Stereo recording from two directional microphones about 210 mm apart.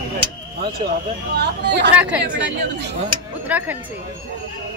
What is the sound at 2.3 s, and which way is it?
Speech, 55° right (ahead or behind).